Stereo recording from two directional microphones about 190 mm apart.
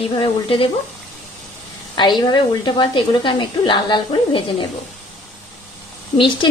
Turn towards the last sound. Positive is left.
turn(degrees=25)  # may be behind; listen again after turning